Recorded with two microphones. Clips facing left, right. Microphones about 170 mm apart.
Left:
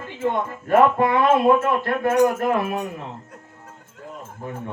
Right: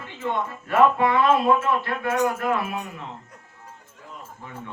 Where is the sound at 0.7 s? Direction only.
50° left (ahead or behind).